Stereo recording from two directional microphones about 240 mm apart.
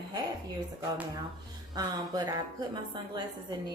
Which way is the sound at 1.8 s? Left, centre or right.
Centre.